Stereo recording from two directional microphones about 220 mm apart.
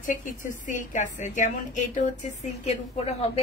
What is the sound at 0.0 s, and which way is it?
A woman's voice, 35° left (ahead or behind).